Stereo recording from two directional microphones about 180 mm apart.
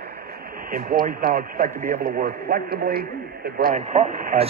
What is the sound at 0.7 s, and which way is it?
A man's voice, 50° right (ahead or behind).